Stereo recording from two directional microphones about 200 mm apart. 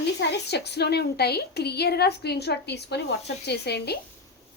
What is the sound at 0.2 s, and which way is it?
A woman's voice, 55° left (ahead or behind).